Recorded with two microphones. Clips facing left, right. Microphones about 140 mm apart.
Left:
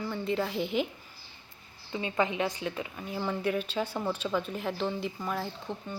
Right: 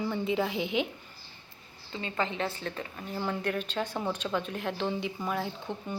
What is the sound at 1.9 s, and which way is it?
A woman's voice, 15° left (ahead or behind).